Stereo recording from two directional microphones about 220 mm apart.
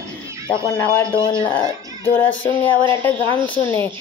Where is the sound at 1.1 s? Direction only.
20° left (ahead or behind).